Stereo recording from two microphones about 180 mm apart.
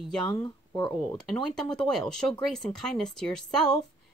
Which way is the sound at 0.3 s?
25° left (ahead or behind).